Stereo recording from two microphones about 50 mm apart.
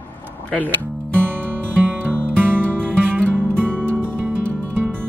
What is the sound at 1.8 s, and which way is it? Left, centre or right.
Music, right.